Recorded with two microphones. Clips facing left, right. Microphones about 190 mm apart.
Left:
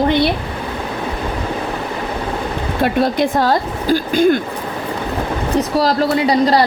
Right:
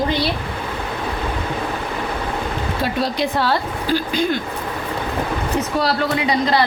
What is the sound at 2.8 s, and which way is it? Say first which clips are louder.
A woman's voice: left 7 dB; 55° left (ahead or behind).